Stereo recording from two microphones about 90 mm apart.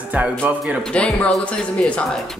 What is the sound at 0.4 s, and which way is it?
Speech, 20° right (ahead or behind).